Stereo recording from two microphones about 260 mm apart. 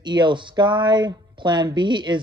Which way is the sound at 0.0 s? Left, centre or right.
Centre.